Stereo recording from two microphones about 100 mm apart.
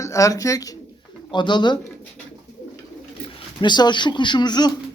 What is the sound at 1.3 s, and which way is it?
Speech, 50° left (ahead or behind).